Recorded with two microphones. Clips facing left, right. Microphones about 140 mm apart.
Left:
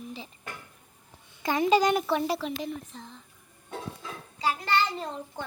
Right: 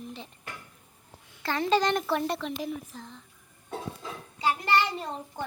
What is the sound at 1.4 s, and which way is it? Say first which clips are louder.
Speech: left 3 dB; 15° left (ahead or behind).